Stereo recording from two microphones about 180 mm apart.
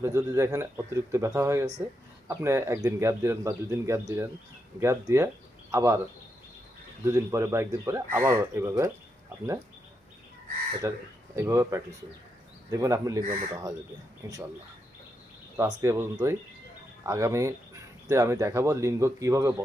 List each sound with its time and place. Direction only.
0.0 s speech: 15° right (ahead or behind)
7.0 s speech: 15° right (ahead or behind)
10.8 s speech: 15° right (ahead or behind)
14.2 s speech: 15° right (ahead or behind)
15.5 s speech: 15° right (ahead or behind)